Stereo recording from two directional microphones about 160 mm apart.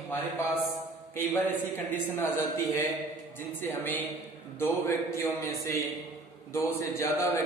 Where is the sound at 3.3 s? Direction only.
15° left (ahead or behind).